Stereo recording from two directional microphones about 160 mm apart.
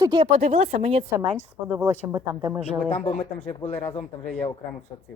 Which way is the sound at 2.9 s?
40° left (ahead or behind).